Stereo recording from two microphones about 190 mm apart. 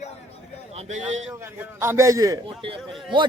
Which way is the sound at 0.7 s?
35° right (ahead or behind).